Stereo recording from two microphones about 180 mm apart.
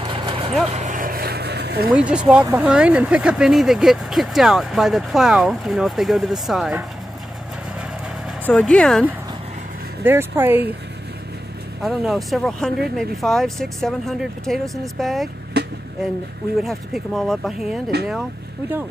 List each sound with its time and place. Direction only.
0.0 s vehicle: 25° right (ahead or behind)
0.7 s vehicle: 40° right (ahead or behind); by 2.0 s 60° right (ahead or behind)
2.0 s speech: 5° right (ahead or behind)
8.5 s speech: 5° left (ahead or behind)
10.0 s speech: 10° right (ahead or behind)
11.8 s speech: centre (ahead or behind)
16.6 s speech: centre (ahead or behind)